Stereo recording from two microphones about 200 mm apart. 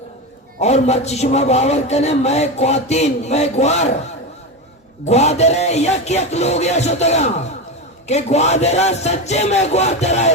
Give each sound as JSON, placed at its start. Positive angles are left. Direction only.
{"t": 0.6, "sound": "a man's voice", "side_deg": 35}
{"t": 5.0, "sound": "a man's voice", "side_deg": 35}